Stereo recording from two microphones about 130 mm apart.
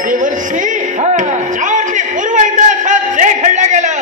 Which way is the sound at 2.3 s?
75° right (ahead or behind).